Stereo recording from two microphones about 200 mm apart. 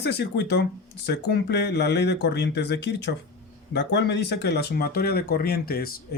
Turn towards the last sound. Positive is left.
turn(degrees=50)  # may be behind; listen again after turning